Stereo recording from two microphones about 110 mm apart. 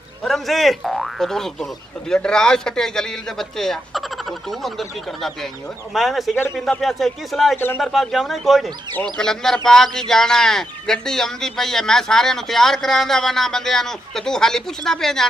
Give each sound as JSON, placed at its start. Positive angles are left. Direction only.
{"t": 0.2, "sound": "a man's voice", "side_deg": 0}
{"t": 7.5, "sound": "speech", "side_deg": 20}
{"t": 7.8, "sound": "a man's voice", "side_deg": 0}